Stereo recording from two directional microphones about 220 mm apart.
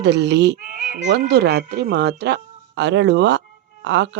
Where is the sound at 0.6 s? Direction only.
35° right (ahead or behind).